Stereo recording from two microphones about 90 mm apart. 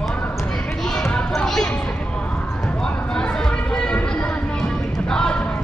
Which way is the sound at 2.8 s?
10° left (ahead or behind).